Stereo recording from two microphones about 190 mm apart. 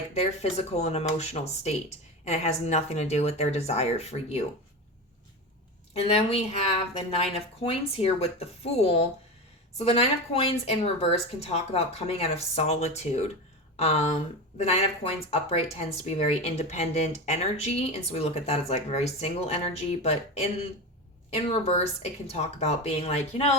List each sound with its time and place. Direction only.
0.1 s speech: 35° left (ahead or behind)
5.9 s speech: 35° left (ahead or behind)
21.2 s speech: 35° left (ahead or behind)